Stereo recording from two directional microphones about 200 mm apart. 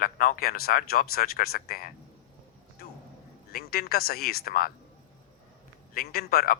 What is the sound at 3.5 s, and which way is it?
A man's voice, 50° left (ahead or behind).